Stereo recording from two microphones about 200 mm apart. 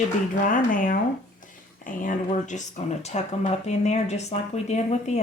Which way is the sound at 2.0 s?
40° left (ahead or behind).